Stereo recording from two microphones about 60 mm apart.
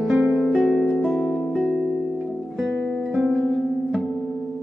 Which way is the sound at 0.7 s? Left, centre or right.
Centre.